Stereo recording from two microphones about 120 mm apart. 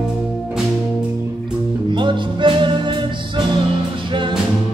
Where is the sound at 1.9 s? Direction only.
40° right (ahead or behind).